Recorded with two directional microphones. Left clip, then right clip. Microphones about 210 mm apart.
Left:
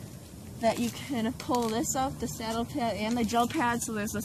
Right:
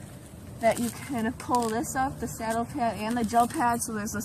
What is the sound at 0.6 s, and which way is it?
Speech, centre (ahead or behind).